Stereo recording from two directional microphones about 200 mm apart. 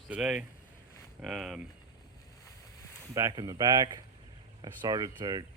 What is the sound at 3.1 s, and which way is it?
Speech, 20° right (ahead or behind).